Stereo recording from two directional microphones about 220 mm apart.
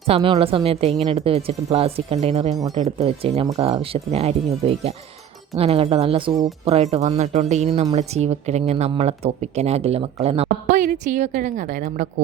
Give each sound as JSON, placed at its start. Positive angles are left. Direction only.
{"t": 0.1, "sound": "speech", "side_deg": -25}